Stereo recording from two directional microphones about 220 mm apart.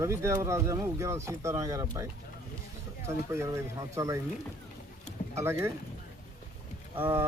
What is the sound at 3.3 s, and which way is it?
Speech, 15° right (ahead or behind).